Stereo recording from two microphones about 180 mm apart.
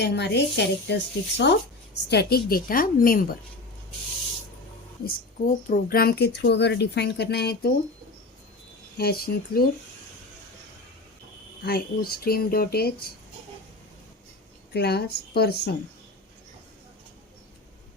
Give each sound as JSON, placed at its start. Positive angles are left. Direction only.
{"t": 0.0, "sound": "speech", "side_deg": 70}
{"t": 2.0, "sound": "speech", "side_deg": 60}
{"t": 5.6, "sound": "speech", "side_deg": 50}
{"t": 9.0, "sound": "speech", "side_deg": 60}
{"t": 11.6, "sound": "speech", "side_deg": 60}
{"t": 14.7, "sound": "speech", "side_deg": 65}